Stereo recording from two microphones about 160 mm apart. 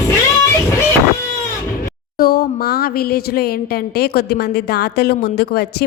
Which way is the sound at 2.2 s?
70° left (ahead or behind).